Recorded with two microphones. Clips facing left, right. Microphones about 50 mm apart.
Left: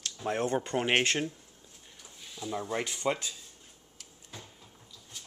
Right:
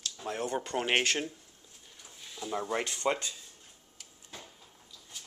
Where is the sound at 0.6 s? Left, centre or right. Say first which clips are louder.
Left 2 dB; centre.